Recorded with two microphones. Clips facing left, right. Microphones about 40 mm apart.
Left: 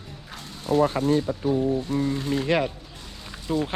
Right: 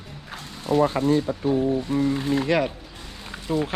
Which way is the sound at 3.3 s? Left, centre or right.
Centre.